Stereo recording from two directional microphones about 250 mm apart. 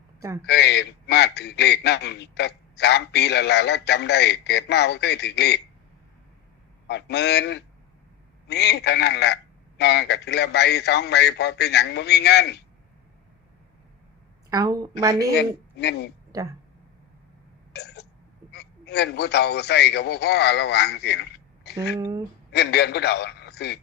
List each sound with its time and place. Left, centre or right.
0.4 s a man's voice: left
6.8 s a man's voice: left
14.5 s a woman's voice: centre
15.3 s a man's voice: left
16.3 s speech: centre
17.7 s throat clearing: left
18.5 s a man's voice: left
21.9 s a woman's voice: centre
22.5 s a man's voice: left